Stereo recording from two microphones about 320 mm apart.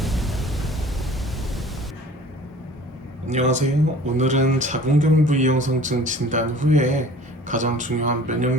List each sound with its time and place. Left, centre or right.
0.0 s pink noise: centre
3.2 s speech: right